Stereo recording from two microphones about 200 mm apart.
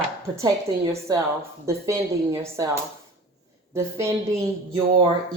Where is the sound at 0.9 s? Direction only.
15° right (ahead or behind).